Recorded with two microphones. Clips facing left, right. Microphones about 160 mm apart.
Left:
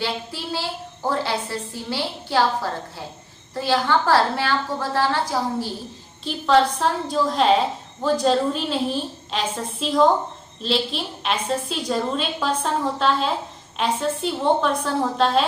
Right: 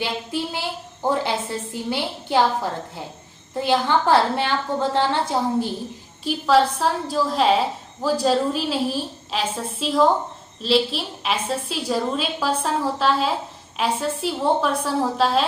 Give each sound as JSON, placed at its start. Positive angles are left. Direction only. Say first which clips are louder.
{"t": 0.0, "sound": "a sound", "louder": "right 2 dB", "side_deg": -15}
{"t": 3.5, "sound": "a woman's voice", "louder": "right 1 dB", "side_deg": -20}
{"t": 6.2, "sound": "a woman's voice", "louder": "even", "side_deg": -5}